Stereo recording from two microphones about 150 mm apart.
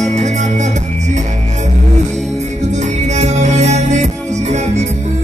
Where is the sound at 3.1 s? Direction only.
50° right (ahead or behind).